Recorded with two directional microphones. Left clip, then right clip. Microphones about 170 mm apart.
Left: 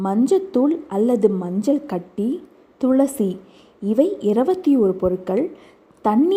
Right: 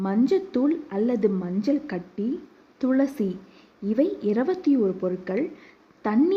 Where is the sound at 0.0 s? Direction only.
15° left (ahead or behind).